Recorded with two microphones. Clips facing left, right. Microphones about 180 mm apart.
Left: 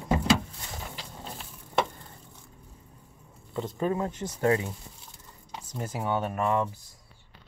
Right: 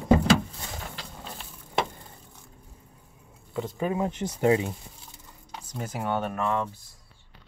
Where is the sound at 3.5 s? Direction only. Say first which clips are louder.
Even; 10° right (ahead or behind).